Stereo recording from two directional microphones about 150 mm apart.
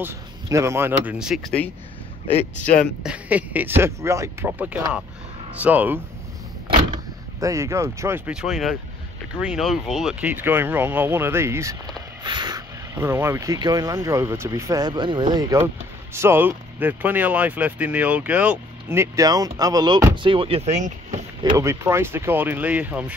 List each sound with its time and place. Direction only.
0.0 s speech: 20° right (ahead or behind); by 1.5 s centre (ahead or behind)
2.6 s speech: 60° left (ahead or behind)
3.0 s speech: 10° right (ahead or behind)
7.3 s speech: 20° right (ahead or behind)
8.3 s speech: centre (ahead or behind)
12.2 s speech: 30° right (ahead or behind); by 21.2 s 50° right (ahead or behind)
21.5 s speech: 15° right (ahead or behind)